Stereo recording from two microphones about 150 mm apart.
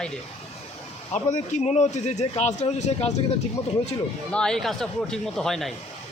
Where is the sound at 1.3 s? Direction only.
50° left (ahead or behind).